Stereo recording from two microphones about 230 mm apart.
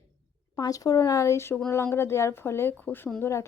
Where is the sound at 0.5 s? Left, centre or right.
Centre.